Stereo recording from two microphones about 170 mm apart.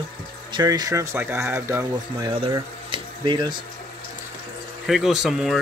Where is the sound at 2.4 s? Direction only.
30° right (ahead or behind).